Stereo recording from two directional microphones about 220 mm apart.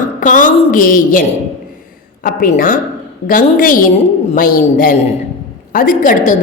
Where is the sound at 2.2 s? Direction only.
40° left (ahead or behind).